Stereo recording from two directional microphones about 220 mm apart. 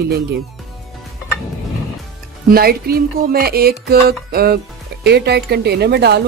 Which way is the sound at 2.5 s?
45° right (ahead or behind).